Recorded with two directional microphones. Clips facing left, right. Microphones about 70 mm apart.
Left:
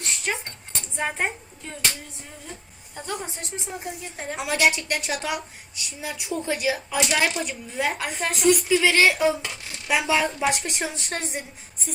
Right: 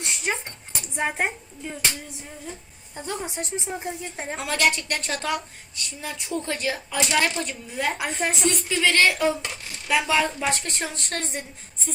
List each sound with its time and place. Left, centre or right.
0.0 s a sound: centre
0.4 s a woman's voice: centre
4.4 s a woman's voice: centre